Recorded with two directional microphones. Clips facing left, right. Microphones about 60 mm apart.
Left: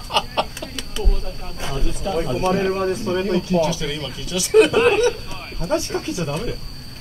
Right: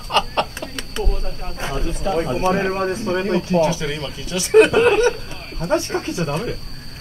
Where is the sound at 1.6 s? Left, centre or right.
Right.